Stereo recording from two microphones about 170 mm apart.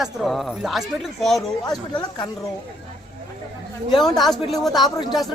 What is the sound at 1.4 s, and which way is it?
Speech, 25° left (ahead or behind).